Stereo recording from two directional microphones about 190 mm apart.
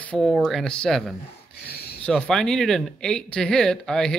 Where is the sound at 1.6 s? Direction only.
55° left (ahead or behind).